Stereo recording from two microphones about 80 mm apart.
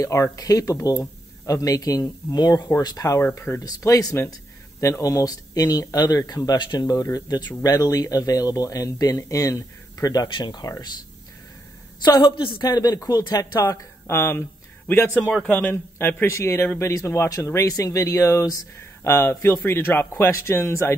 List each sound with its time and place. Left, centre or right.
0.0 s speech: left
3.3 s speech: left
10.3 s a woman's voice: left
12.0 s a woman's voice: left
13.6 s speech: left
15.4 s speech: centre
15.7 s speech: left
17.7 s speech: left